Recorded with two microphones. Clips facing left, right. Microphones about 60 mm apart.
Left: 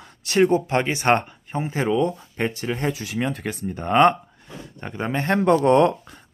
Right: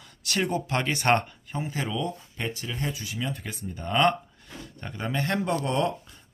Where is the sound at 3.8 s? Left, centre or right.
Left.